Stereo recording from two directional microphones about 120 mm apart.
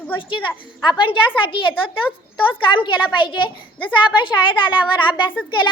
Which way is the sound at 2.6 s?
45° left (ahead or behind).